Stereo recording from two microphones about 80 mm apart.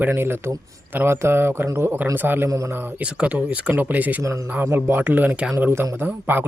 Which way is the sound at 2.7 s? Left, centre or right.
Right.